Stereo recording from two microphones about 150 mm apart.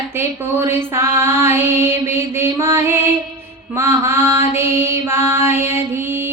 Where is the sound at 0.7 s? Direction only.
15° right (ahead or behind).